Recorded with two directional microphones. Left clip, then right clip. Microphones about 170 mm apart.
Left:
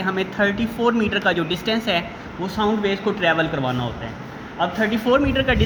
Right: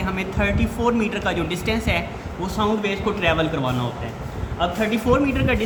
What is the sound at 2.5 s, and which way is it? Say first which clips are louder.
Speech: left 1 dB; 20° left (ahead or behind).